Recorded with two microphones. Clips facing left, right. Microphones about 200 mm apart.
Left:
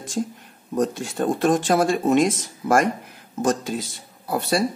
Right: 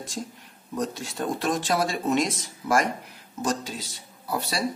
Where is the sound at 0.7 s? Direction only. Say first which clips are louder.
Left 7 dB; 50° left (ahead or behind).